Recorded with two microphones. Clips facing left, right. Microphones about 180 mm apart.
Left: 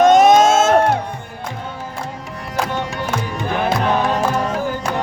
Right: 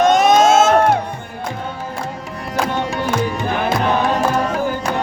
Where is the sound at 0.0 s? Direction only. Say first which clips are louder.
Left 2 dB; 45° left (ahead or behind).